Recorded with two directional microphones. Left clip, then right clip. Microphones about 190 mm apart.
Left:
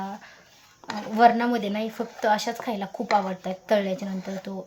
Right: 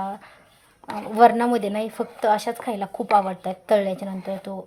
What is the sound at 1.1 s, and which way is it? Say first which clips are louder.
Speech: right 3 dB; 25° right (ahead or behind).